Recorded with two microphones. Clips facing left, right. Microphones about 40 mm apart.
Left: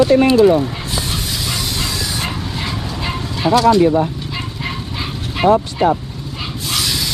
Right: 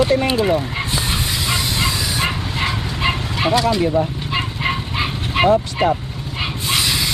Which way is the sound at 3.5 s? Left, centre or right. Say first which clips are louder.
Left 6 dB; centre.